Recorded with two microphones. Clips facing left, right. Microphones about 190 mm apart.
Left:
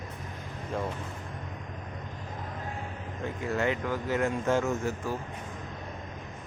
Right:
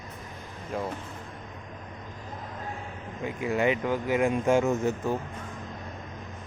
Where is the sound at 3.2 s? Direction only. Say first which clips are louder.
Right 3 dB; 15° right (ahead or behind).